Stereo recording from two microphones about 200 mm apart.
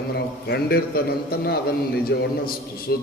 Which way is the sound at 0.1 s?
55° left (ahead or behind).